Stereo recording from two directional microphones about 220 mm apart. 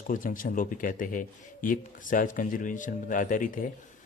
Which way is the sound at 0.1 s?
35° left (ahead or behind).